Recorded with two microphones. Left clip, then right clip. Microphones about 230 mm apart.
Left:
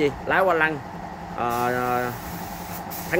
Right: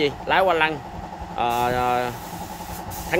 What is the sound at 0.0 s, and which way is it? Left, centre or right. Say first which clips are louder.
Speech: right 1 dB; centre.